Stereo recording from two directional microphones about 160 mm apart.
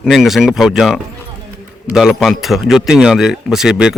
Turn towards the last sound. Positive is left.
turn(degrees=-5)  # may be behind; listen again after turning